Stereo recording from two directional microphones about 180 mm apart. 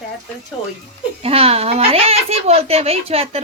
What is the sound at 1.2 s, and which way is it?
Speech, 35° right (ahead or behind).